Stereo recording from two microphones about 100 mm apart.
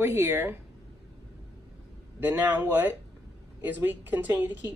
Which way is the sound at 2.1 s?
20° right (ahead or behind).